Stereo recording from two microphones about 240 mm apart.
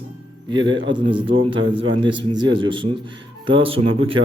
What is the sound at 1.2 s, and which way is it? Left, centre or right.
Speech, right.